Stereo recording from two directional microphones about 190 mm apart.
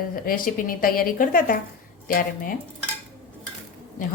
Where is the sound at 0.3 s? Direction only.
45° left (ahead or behind).